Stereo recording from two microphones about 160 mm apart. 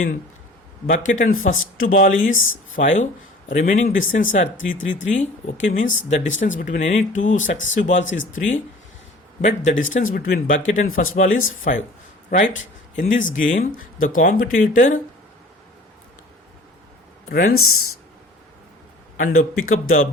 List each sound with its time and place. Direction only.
0.9 s speech: 55° left (ahead or behind)
9.6 s speech: 55° left (ahead or behind)
17.2 s speech: 65° left (ahead or behind)
19.1 s speech: 60° left (ahead or behind)